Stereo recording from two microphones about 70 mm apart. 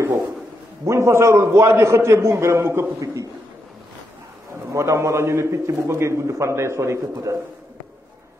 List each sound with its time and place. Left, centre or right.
0.8 s a man's voice: right
4.7 s a man's voice: right